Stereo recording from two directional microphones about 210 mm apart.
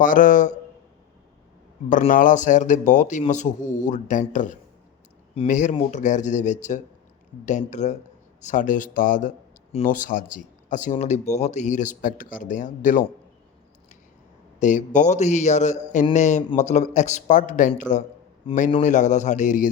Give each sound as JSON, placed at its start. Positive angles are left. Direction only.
{"t": 0.0, "sound": "speech", "side_deg": 40}
{"t": 1.9, "sound": "speech", "side_deg": 40}
{"t": 14.6, "sound": "speech", "side_deg": 35}